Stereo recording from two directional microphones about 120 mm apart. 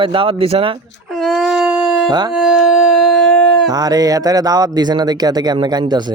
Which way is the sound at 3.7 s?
35° right (ahead or behind).